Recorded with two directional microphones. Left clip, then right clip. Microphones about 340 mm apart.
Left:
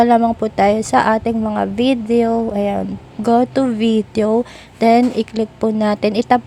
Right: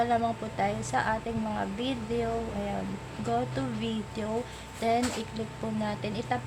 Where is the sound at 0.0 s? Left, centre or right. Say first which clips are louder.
Left 14 dB; left.